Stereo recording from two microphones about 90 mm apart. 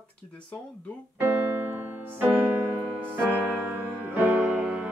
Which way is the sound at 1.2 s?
25° right (ahead or behind).